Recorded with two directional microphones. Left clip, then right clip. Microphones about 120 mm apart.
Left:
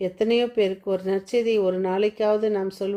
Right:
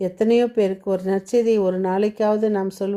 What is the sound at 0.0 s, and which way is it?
A woman's voice, 40° right (ahead or behind).